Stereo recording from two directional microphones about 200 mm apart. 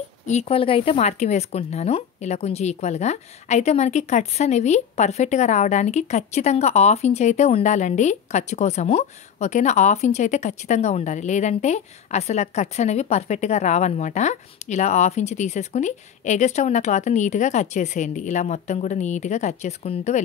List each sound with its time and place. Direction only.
0.3 s a woman's voice: 30° left (ahead or behind)